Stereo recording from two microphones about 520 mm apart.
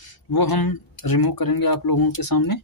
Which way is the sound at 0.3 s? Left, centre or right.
Left.